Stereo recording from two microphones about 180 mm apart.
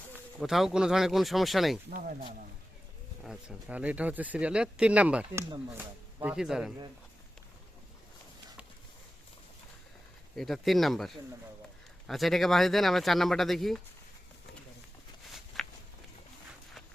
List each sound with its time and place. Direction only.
0.3 s speech: centre (ahead or behind)
1.9 s speech: 50° right (ahead or behind)
3.2 s speech: 5° right (ahead or behind)
6.2 s speech: 5° right (ahead or behind)
10.3 s speech: centre (ahead or behind)
15.6 s a sound: centre (ahead or behind)